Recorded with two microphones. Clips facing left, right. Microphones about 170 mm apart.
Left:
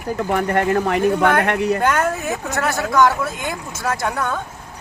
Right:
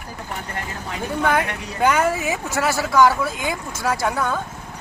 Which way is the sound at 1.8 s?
Centre (ahead or behind).